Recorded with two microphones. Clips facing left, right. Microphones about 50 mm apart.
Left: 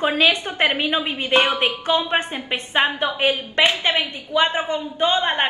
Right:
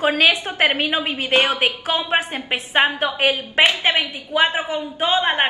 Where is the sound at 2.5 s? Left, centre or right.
Centre.